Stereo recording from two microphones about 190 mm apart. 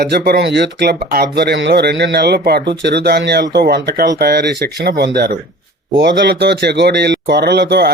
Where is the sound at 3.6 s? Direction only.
55° right (ahead or behind).